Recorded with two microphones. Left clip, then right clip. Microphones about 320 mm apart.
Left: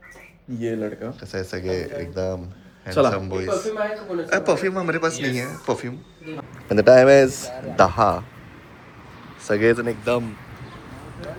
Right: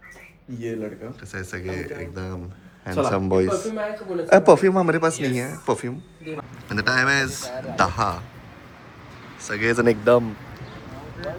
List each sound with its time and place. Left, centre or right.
0.6 s speech: left
1.3 s speech: centre
3.1 s a man's voice: centre
9.4 s speech: centre
9.7 s a man's voice: centre